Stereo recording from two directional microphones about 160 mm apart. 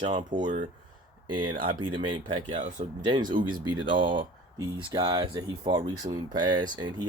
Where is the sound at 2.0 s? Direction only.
30° right (ahead or behind).